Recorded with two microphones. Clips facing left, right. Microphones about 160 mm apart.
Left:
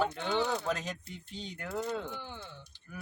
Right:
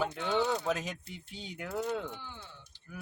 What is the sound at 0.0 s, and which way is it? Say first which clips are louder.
Speech: even; 5° right (ahead or behind).